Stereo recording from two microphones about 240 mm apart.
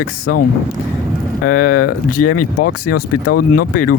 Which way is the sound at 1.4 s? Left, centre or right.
Left.